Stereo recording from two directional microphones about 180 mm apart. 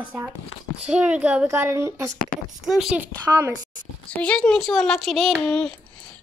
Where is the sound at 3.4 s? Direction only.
20° right (ahead or behind).